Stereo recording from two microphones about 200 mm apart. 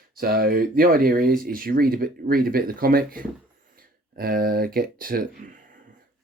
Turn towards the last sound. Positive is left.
turn(degrees=-45)  # may be behind; listen again after turning